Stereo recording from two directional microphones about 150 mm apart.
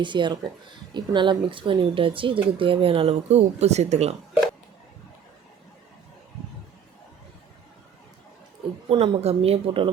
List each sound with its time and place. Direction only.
0.0 s speech: 30° right (ahead or behind); by 4.2 s 45° right (ahead or behind)
8.9 s speech: 40° right (ahead or behind)